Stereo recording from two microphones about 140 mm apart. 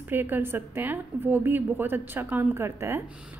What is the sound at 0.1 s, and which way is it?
A woman's voice, 15° right (ahead or behind).